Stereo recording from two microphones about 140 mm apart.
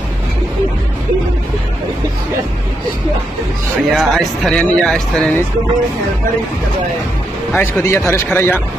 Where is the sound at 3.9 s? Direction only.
Centre (ahead or behind).